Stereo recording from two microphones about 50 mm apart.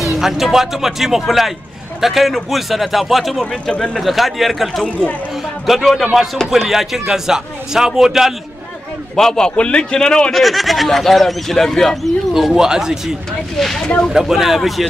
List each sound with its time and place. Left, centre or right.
0.2 s speech: centre
3.6 s a man's voice: centre
4.0 s a man's voice: centre
9.1 s a man's voice: centre
9.6 s a man's voice: left
10.3 s speech: centre
13.6 s a man's voice: centre
14.1 s speech: centre